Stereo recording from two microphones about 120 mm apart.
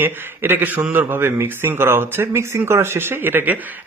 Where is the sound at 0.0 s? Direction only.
15° right (ahead or behind).